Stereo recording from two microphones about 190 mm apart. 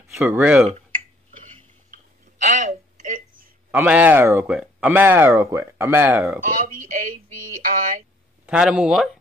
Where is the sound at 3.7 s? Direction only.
5° right (ahead or behind).